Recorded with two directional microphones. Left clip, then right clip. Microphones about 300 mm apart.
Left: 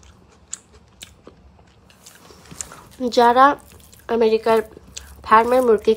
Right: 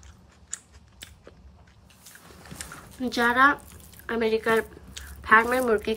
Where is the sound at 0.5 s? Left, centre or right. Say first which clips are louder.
Left 3 dB; centre.